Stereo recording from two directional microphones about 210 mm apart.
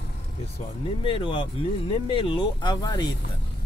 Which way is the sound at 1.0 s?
25° left (ahead or behind).